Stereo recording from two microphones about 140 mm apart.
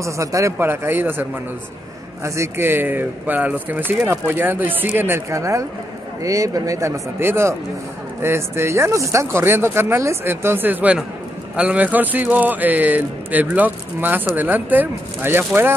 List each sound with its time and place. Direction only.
0.0 s speech: 20° right (ahead or behind)
2.2 s speech: 20° right (ahead or behind)